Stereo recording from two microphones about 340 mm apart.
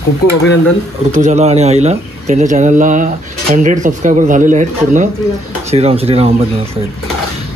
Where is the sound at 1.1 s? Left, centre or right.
Right.